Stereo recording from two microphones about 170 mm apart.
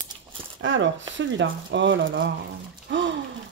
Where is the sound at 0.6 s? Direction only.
90° right.